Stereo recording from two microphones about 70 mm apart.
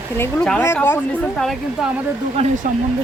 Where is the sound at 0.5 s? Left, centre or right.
Left.